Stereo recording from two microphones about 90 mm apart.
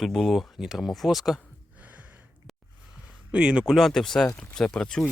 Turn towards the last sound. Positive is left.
turn(degrees=5)  # may be behind; listen again after turning